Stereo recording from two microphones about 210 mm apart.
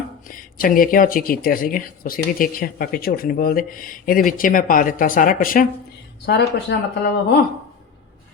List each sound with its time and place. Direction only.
0.3 s speech: 40° left (ahead or behind)